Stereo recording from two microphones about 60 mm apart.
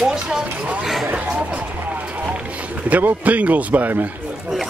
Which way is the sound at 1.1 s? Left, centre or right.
Right.